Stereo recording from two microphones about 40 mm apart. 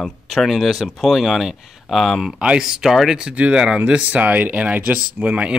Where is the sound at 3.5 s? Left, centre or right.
Right.